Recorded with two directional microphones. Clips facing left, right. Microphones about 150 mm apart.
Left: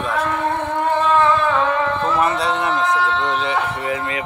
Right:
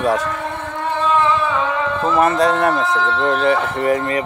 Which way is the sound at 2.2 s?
45° right (ahead or behind).